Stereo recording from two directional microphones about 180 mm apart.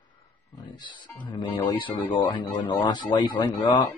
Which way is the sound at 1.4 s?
25° left (ahead or behind).